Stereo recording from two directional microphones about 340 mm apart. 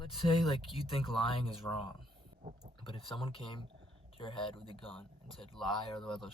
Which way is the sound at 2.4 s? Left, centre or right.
Right.